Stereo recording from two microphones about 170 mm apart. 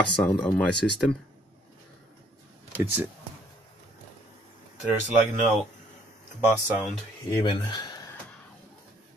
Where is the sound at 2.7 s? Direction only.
10° right (ahead or behind).